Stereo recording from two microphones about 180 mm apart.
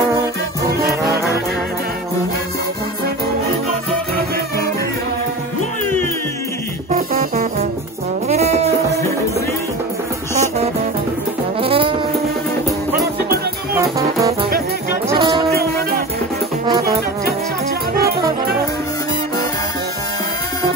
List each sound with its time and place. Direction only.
0.8 s music: 60° right (ahead or behind)
6.9 s music: 50° right (ahead or behind)
8.3 s music: 35° right (ahead or behind)
11.6 s music: 30° right (ahead or behind)
13.7 s music: 20° right (ahead or behind)